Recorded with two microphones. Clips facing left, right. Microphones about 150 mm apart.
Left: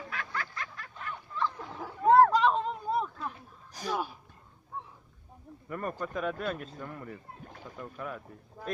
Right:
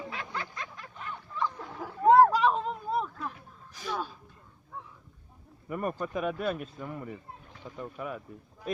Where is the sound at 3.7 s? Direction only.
40° left (ahead or behind).